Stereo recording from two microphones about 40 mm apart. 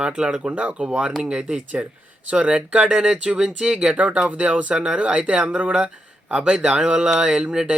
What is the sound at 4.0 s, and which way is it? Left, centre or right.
Speech, right.